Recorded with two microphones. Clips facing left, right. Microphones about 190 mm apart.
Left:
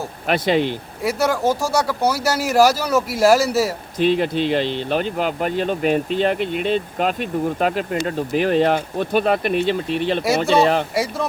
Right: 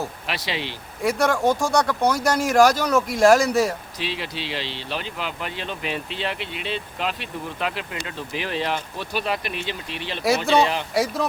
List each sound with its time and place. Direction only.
0.3 s speech: 50° left (ahead or behind)
1.0 s speech: 5° left (ahead or behind)
3.9 s speech: 50° left (ahead or behind)
10.2 s speech: centre (ahead or behind)